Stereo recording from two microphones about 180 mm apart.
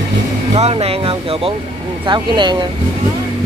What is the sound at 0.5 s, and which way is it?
Speech, 35° right (ahead or behind).